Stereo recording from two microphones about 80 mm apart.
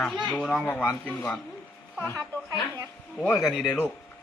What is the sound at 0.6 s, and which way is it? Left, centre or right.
Speech, left.